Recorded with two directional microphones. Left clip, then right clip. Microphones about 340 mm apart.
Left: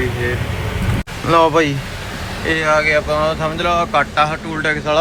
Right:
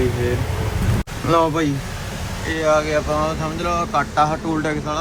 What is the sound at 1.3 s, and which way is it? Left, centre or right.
Speech, centre.